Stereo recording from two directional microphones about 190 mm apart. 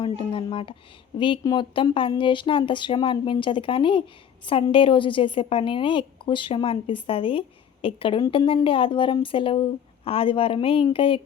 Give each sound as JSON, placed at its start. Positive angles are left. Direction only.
{"t": 0.0, "sound": "a woman's voice", "side_deg": 25}